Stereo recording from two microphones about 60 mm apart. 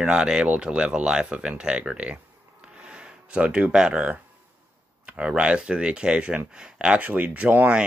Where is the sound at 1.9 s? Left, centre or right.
Centre.